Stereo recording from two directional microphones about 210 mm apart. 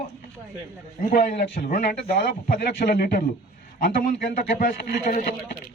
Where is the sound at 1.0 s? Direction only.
40° left (ahead or behind).